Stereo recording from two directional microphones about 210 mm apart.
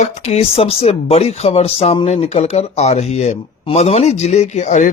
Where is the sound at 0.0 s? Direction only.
30° left (ahead or behind).